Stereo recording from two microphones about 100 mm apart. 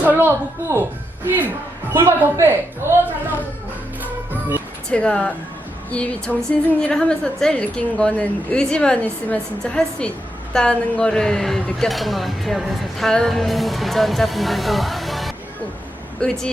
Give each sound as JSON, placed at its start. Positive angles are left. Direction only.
{"t": 0.0, "sound": "speech", "side_deg": -20}
{"t": 1.9, "sound": "speech", "side_deg": -25}
{"t": 4.9, "sound": "a woman's voice", "side_deg": 10}
{"t": 16.2, "sound": "a woman's voice", "side_deg": 10}